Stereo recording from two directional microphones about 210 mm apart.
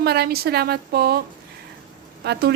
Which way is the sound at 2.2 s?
50° right (ahead or behind).